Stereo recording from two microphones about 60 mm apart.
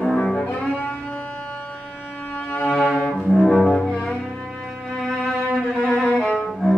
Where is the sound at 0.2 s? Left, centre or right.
Centre.